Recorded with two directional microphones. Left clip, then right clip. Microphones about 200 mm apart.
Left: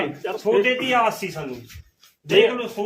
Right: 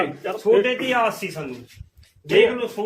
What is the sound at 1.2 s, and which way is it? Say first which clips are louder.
Speech: even; 60° left (ahead or behind).